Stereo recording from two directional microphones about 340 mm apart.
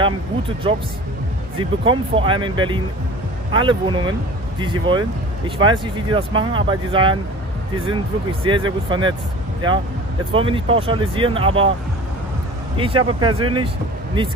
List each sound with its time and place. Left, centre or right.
0.7 s speech: centre
12.7 s speech: centre